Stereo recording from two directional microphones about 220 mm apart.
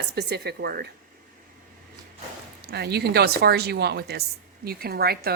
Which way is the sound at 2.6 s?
45° right (ahead or behind).